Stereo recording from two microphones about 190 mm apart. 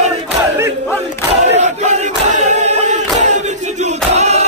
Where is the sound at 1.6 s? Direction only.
40° right (ahead or behind).